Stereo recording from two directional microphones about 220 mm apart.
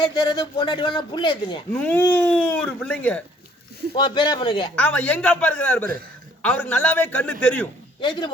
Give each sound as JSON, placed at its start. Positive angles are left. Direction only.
{"t": 0.2, "sound": "a man's voice", "side_deg": 20}
{"t": 1.7, "sound": "speech", "side_deg": 10}
{"t": 3.9, "sound": "a man's voice", "side_deg": 20}
{"t": 4.7, "sound": "speech", "side_deg": 5}
{"t": 8.0, "sound": "a man's voice", "side_deg": 20}